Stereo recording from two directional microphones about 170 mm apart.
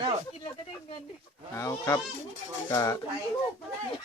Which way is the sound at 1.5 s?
15° left (ahead or behind).